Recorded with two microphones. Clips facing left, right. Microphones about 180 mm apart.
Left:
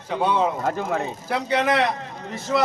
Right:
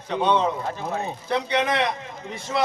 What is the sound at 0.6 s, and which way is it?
Speech, 90° left.